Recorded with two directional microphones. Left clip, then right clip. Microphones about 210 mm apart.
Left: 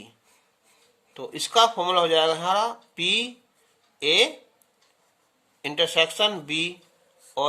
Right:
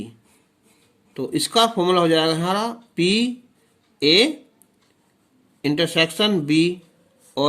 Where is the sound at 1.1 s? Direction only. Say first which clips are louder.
Right 2 dB; 15° right (ahead or behind).